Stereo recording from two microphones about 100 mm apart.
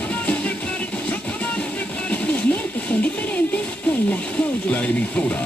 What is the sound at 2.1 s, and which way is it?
Music, 15° left (ahead or behind).